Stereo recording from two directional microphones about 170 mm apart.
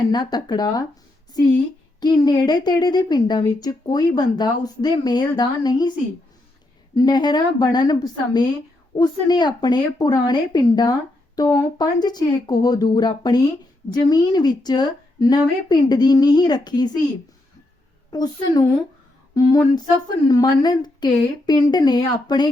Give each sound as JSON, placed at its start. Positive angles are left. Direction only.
{"t": 0.1, "sound": "a woman's voice", "side_deg": 25}
{"t": 2.0, "sound": "a woman's voice", "side_deg": 25}
{"t": 6.9, "sound": "a woman's voice", "side_deg": 25}
{"t": 18.1, "sound": "a woman's voice", "side_deg": 25}